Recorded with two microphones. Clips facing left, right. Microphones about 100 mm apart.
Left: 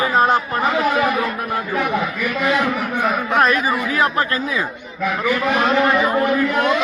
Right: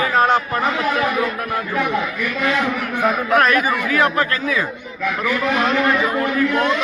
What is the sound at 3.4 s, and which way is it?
Speech, 25° left (ahead or behind).